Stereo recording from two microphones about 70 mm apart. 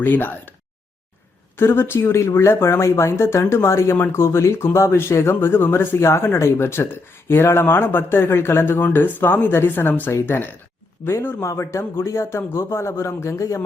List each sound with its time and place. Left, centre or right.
0.0 s speech: left
1.5 s speech: left